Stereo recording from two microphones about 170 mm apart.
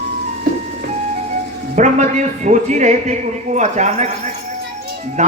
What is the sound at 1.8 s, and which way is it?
Speech, 45° right (ahead or behind).